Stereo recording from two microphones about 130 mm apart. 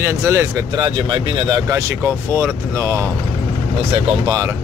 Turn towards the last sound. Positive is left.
turn(degrees=-20)  # may be behind; listen again after turning